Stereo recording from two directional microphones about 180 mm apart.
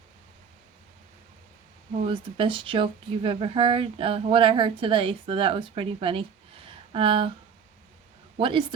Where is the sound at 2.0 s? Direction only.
30° right (ahead or behind).